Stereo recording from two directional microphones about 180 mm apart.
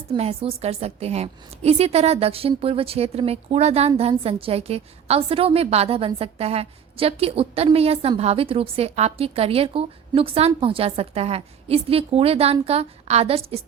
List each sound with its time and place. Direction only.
0.1 s a woman's voice: 35° right (ahead or behind)